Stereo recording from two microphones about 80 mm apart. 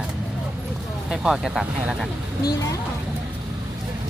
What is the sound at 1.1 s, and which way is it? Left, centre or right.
Speech, centre.